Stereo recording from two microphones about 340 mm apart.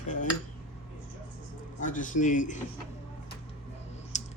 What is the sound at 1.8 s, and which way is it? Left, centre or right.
Speech, left.